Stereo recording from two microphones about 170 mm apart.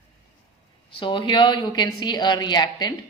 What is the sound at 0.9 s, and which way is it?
A woman's voice, 30° left (ahead or behind).